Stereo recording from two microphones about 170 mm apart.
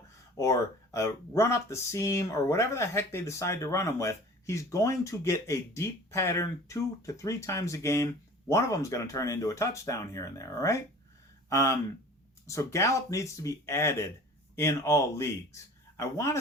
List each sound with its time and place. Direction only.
0.3 s speech: 20° left (ahead or behind)